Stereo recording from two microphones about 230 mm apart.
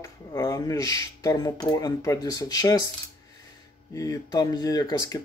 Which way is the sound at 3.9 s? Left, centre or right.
Centre.